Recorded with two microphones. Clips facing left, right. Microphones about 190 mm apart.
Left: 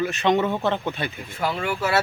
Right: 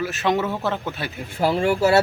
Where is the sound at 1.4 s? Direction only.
30° right (ahead or behind).